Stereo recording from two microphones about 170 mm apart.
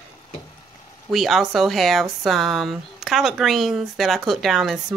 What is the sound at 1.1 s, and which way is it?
Speech, centre (ahead or behind).